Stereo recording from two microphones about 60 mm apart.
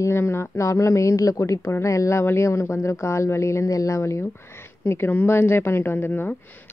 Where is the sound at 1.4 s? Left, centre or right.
Left.